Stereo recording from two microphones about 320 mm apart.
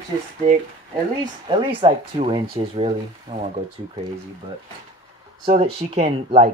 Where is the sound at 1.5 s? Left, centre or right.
Centre.